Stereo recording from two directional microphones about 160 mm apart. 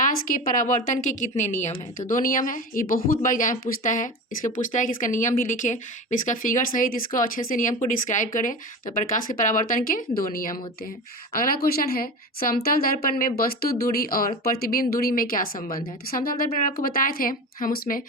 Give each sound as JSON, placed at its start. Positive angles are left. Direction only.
{"t": 0.0, "sound": "a woman's voice", "side_deg": 60}
{"t": 2.0, "sound": "speech", "side_deg": 60}